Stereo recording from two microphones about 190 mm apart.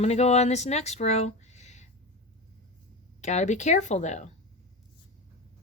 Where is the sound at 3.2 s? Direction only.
40° left (ahead or behind).